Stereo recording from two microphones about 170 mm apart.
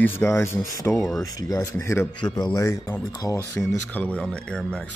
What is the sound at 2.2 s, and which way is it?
Speech, 25° left (ahead or behind).